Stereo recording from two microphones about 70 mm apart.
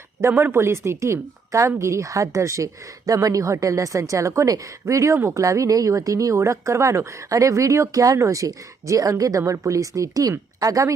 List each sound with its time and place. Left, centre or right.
0.2 s a woman's voice: right